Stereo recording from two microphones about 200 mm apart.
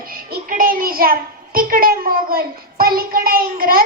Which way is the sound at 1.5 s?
45° right (ahead or behind).